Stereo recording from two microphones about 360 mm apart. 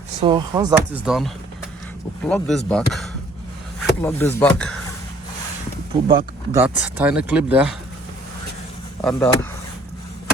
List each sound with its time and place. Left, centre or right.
0.2 s speech: centre
6.1 s speech: centre
9.0 s speech: centre